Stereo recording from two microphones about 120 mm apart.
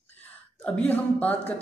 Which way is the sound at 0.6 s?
10° left (ahead or behind).